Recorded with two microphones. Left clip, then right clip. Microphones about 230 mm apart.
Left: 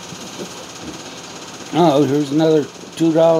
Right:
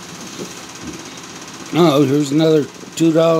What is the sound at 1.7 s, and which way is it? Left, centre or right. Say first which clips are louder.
Speech: even; right.